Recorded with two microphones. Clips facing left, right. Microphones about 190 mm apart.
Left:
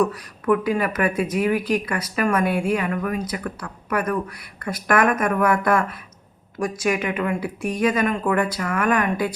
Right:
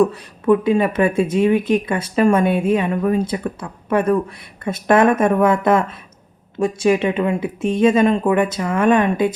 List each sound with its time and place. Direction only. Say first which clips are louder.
0.0 s speech: right 5 dB; 25° right (ahead or behind)